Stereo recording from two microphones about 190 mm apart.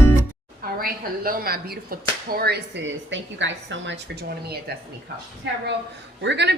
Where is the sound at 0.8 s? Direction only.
50° right (ahead or behind).